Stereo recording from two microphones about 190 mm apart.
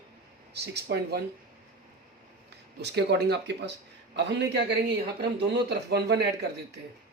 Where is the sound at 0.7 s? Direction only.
60° right (ahead or behind).